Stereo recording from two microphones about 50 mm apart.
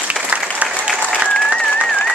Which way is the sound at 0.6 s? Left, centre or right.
Right.